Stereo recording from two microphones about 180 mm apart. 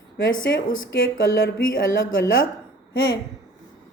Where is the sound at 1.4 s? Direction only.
70° left (ahead or behind).